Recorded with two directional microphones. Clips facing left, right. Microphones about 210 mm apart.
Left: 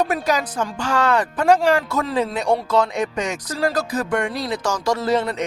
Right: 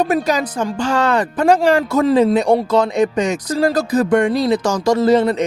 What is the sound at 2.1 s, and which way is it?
Speech, 40° right (ahead or behind).